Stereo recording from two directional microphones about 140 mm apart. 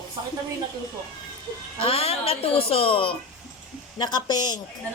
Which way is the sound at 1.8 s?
45° left (ahead or behind).